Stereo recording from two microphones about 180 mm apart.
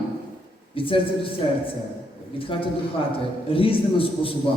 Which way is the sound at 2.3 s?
30° left (ahead or behind).